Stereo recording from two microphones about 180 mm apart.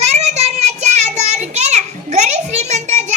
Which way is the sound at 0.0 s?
35° right (ahead or behind).